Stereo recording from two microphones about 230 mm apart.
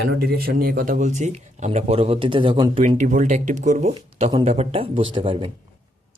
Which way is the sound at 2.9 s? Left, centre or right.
Right.